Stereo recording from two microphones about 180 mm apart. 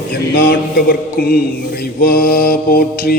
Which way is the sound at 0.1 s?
60° left (ahead or behind).